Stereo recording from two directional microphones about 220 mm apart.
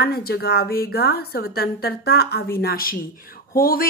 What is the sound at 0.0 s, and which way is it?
A woman's voice, 45° left (ahead or behind).